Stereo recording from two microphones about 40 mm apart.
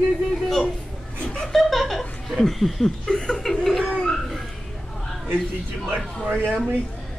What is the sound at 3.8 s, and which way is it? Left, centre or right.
Bird, left.